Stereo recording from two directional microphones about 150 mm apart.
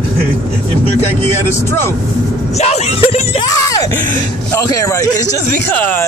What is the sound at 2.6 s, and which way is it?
Speech, 45° left (ahead or behind).